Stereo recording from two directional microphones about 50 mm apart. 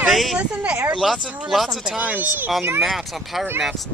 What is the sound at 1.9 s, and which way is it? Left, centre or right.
Speech, right.